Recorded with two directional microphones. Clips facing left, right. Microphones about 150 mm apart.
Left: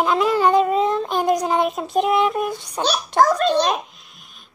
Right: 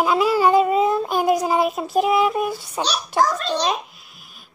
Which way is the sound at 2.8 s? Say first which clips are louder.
Left 3 dB; 50° left (ahead or behind).